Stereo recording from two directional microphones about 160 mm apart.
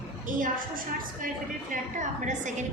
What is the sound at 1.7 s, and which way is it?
Speech, 50° right (ahead or behind).